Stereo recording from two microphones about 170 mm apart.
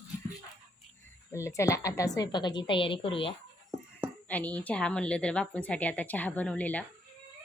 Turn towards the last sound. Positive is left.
turn(degrees=10)  # may be behind; listen again after turning